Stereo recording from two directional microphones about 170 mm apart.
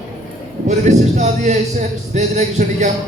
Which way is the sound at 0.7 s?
45° right (ahead or behind).